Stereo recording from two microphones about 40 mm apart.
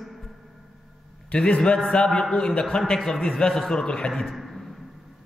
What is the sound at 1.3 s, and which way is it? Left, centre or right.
A man's voice, left.